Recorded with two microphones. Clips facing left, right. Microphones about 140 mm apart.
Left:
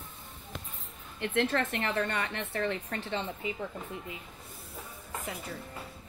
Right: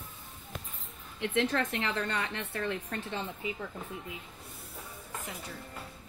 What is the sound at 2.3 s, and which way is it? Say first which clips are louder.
Speech: left 2 dB; 65° left (ahead or behind).